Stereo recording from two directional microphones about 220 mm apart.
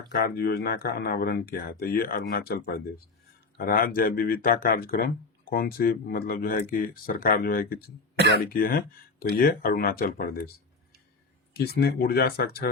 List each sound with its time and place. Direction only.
0.1 s speech: 45° left (ahead or behind)
3.6 s speech: 40° left (ahead or behind)
11.5 s speech: 45° left (ahead or behind)